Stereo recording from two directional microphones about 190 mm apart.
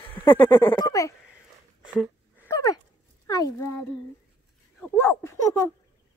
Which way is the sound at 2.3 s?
15° left (ahead or behind).